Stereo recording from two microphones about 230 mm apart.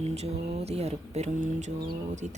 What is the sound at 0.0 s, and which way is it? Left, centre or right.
Speech, right.